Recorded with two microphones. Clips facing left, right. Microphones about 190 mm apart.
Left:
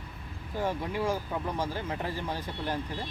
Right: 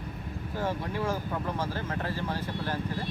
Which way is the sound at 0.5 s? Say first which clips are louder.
Left 1 dB; 15° left (ahead or behind).